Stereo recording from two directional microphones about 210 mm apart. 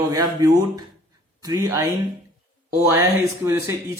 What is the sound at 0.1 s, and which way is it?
A man's voice, 15° right (ahead or behind).